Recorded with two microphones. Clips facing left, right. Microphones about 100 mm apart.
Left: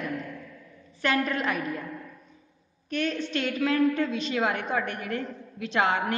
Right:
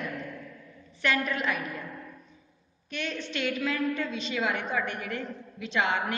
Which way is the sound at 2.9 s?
45° left (ahead or behind).